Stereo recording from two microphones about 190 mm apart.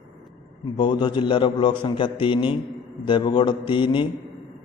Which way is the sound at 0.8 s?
25° left (ahead or behind).